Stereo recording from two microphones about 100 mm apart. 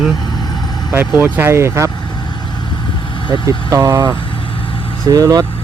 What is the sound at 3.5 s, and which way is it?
Speech, 35° right (ahead or behind).